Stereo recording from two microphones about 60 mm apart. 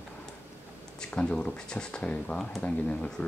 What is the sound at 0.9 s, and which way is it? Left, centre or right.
Speech, centre.